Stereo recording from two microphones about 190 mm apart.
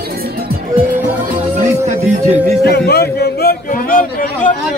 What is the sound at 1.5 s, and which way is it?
Music, 40° right (ahead or behind).